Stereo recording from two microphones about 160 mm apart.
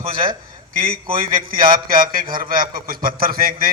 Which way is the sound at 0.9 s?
60° right (ahead or behind).